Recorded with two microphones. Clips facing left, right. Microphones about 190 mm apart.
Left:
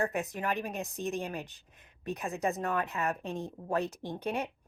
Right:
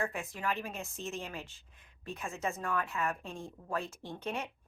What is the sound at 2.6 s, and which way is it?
Speech, 20° left (ahead or behind).